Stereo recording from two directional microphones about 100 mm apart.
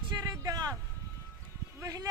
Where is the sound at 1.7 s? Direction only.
35° right (ahead or behind).